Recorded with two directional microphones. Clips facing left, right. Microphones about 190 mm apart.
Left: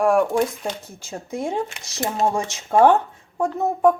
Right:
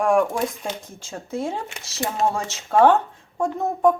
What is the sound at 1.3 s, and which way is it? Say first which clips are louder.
A woman's voice: left 2 dB; 15° left (ahead or behind).